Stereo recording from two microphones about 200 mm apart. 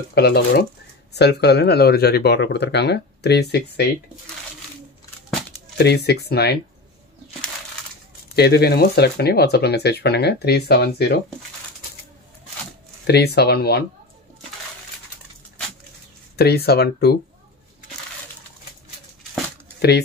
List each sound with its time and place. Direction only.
0.1 s speech: 55° left (ahead or behind)
5.8 s speech: 55° left (ahead or behind)
8.4 s speech: 50° left (ahead or behind)
13.0 s speech: 55° left (ahead or behind)
16.3 s speech: 50° left (ahead or behind)